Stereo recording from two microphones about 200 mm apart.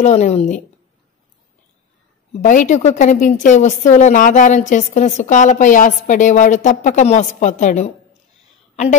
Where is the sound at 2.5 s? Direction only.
40° left (ahead or behind).